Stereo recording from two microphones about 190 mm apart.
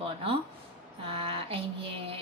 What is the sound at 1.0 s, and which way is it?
A woman's voice, 30° right (ahead or behind).